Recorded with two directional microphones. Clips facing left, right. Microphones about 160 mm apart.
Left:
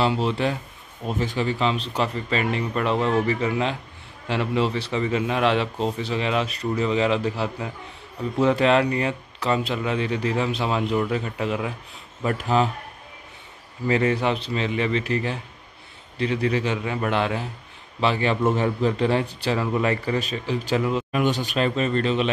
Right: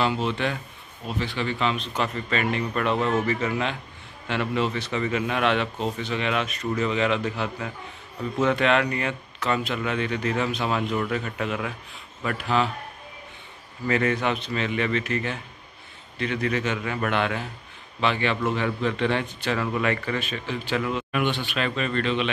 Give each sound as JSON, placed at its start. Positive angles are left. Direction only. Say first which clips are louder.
{"t": 0.0, "sound": "speech", "louder": "left 2 dB", "side_deg": 30}
{"t": 1.0, "sound": "speech", "louder": "left 4 dB", "side_deg": 45}
{"t": 12.4, "sound": "speech", "louder": "left 2 dB", "side_deg": 40}
{"t": 13.8, "sound": "speech", "louder": "left 2 dB", "side_deg": 25}
{"t": 18.0, "sound": "speech", "louder": "left 3 dB", "side_deg": 35}
{"t": 20.2, "sound": "speech", "louder": "left 4 dB", "side_deg": 40}